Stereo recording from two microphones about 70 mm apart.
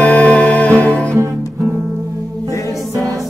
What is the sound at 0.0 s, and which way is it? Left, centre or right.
Music, left.